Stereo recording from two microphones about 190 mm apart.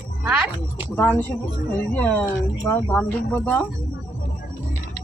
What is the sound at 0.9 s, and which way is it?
Speech, 10° left (ahead or behind).